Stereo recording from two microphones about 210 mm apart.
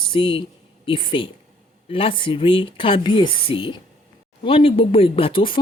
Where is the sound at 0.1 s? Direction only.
25° left (ahead or behind).